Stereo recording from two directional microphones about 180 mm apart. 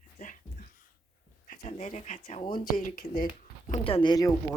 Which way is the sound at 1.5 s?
40° left (ahead or behind).